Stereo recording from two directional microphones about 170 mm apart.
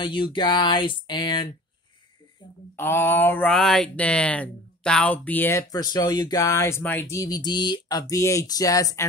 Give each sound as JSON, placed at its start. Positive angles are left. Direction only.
{"t": 0.0, "sound": "speech", "side_deg": 30}
{"t": 2.7, "sound": "speech", "side_deg": 10}